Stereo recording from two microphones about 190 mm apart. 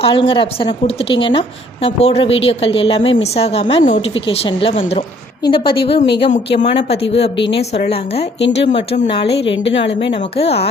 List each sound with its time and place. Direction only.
0.0 s a woman's voice: 30° left (ahead or behind)
9.5 s a woman's voice: 75° left (ahead or behind)
9.8 s speech: 30° left (ahead or behind)